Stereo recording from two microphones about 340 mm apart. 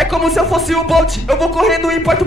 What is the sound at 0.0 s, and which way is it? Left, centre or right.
A man's voice, centre.